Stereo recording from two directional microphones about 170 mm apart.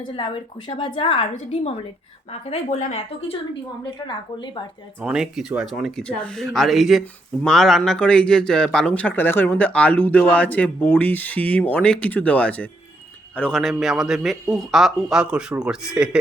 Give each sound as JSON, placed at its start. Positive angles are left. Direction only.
{"t": 0.7, "sound": "a woman's voice", "side_deg": 30}
{"t": 2.5, "sound": "a woman's voice", "side_deg": 45}
{"t": 5.0, "sound": "a man's voice", "side_deg": -5}